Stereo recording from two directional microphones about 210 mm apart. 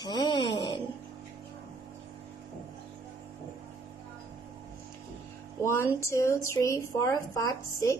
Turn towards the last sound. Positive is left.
turn(degrees=15)  # may be behind; listen again after turning